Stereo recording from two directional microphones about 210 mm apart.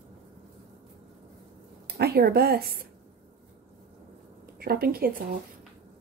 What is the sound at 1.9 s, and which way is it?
Speech, 50° right (ahead or behind).